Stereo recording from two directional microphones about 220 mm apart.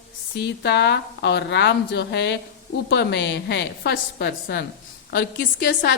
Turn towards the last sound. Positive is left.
turn(degrees=50)  # may be behind; listen again after turning